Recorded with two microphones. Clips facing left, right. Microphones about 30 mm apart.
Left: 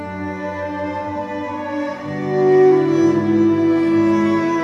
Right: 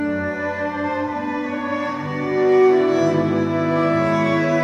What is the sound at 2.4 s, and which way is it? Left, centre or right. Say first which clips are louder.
Music: left 2 dB; centre.